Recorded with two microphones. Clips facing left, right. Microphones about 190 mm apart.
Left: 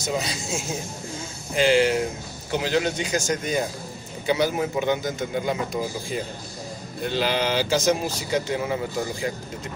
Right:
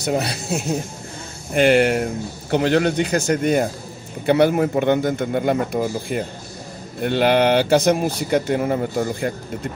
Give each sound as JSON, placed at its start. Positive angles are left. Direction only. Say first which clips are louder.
{"t": 0.0, "sound": "speech", "louder": "right 5 dB", "side_deg": -60}